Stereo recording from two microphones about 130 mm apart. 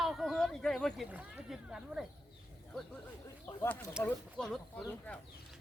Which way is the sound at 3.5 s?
15° left (ahead or behind).